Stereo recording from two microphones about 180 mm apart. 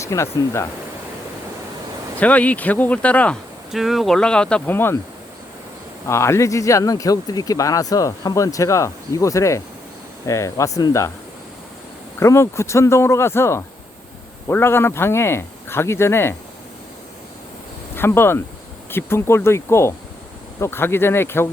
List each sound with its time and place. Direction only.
0.0 s speech: 15° left (ahead or behind)
2.1 s speech: 10° left (ahead or behind)
6.1 s speech: 15° left (ahead or behind)
12.2 s speech: 15° left (ahead or behind)
17.9 s speech: 10° left (ahead or behind)